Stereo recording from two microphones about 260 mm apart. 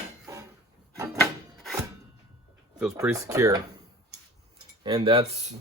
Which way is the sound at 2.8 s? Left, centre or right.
Centre.